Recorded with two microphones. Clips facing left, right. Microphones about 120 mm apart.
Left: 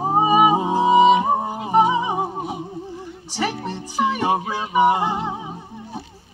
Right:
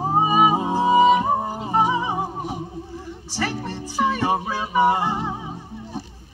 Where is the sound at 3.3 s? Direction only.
15° left (ahead or behind).